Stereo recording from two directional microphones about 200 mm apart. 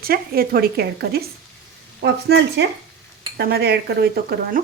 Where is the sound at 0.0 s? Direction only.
50° right (ahead or behind).